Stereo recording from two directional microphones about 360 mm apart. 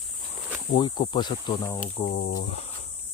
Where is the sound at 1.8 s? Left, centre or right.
Left.